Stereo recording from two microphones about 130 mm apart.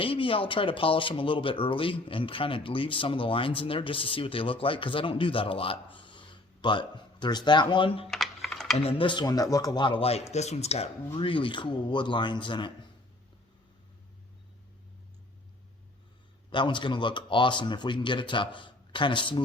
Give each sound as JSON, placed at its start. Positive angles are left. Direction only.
{"t": 0.0, "sound": "speech", "side_deg": 45}
{"t": 8.1, "sound": "typing", "side_deg": 0}
{"t": 8.8, "sound": "speech", "side_deg": 45}
{"t": 16.5, "sound": "speech", "side_deg": 40}